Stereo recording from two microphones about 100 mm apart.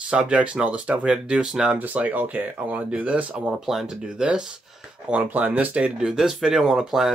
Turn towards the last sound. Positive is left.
turn(degrees=-5)  # may be behind; listen again after turning